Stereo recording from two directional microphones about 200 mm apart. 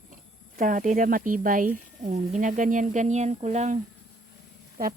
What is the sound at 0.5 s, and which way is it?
Speech, 40° right (ahead or behind).